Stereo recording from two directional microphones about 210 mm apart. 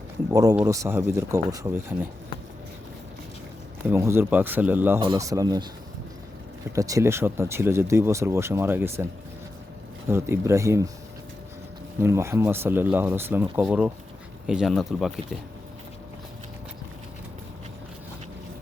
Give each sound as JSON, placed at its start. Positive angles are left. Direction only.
{"t": 0.3, "sound": "speech", "side_deg": -15}
{"t": 3.8, "sound": "speech", "side_deg": -10}
{"t": 4.9, "sound": "speech", "side_deg": -20}
{"t": 6.7, "sound": "speech", "side_deg": -15}
{"t": 10.1, "sound": "speech", "side_deg": -10}
{"t": 11.9, "sound": "speech", "side_deg": -10}